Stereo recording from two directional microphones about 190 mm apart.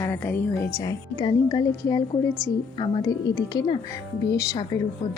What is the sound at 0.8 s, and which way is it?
Speech, 20° left (ahead or behind).